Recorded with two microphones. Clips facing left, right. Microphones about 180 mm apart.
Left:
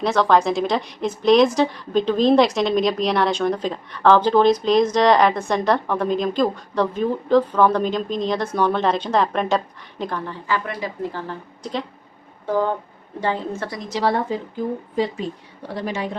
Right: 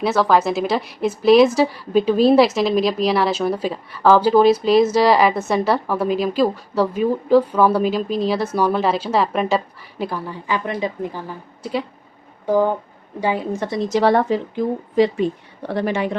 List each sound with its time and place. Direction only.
0.0 s a woman's voice: 5° right (ahead or behind)
14.0 s a woman's voice: 70° right (ahead or behind)